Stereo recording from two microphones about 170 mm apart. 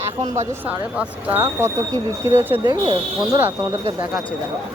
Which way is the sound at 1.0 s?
10° right (ahead or behind).